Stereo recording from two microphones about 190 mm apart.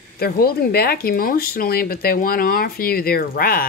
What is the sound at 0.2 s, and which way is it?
Speech, 55° left (ahead or behind).